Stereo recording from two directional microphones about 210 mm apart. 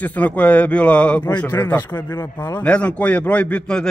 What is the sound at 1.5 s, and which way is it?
Speech, 10° left (ahead or behind).